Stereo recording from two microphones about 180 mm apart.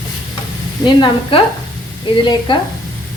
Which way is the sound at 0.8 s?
25° left (ahead or behind).